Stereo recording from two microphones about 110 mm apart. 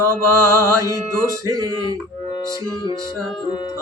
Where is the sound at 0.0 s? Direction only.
25° right (ahead or behind).